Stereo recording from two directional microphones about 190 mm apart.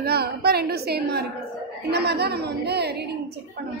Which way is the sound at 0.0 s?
55° right (ahead or behind).